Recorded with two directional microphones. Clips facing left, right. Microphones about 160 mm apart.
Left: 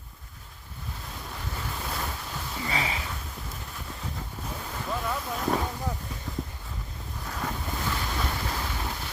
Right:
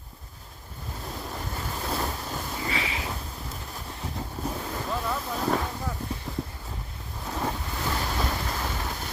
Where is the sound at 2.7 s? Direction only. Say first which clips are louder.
Left 3 dB; 35° left (ahead or behind).